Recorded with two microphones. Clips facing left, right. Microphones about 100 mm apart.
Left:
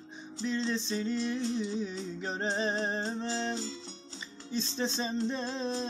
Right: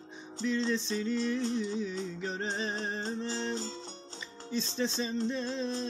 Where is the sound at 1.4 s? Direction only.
45° right (ahead or behind).